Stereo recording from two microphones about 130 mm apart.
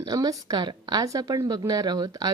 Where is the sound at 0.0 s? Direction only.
30° right (ahead or behind).